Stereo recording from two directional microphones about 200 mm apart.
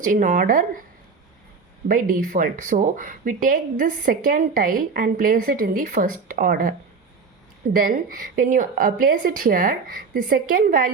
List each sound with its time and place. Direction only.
0.0 s speech: 40° right (ahead or behind)
1.9 s speech: 45° right (ahead or behind)